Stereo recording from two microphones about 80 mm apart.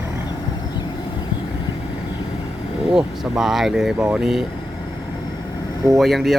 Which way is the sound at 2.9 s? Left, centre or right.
Centre.